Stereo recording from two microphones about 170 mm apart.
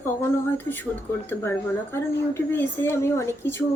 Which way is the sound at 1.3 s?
15° left (ahead or behind).